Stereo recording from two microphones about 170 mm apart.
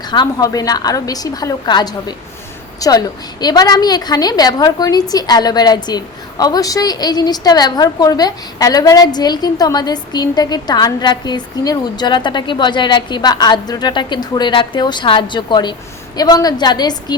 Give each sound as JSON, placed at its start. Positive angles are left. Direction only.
{"t": 0.1, "sound": "a woman's voice", "side_deg": 25}